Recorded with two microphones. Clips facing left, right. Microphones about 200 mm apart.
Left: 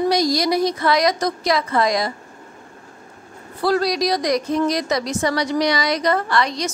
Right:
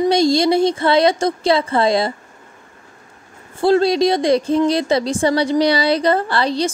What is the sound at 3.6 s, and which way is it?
A woman's voice, 25° right (ahead or behind).